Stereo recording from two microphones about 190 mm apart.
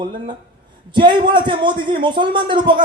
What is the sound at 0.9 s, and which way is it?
A man's voice, 25° right (ahead or behind).